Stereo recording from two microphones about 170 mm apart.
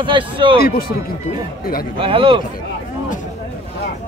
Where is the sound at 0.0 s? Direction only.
30° right (ahead or behind).